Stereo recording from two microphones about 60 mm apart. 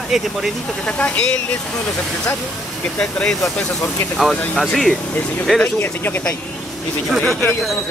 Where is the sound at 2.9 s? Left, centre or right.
Centre.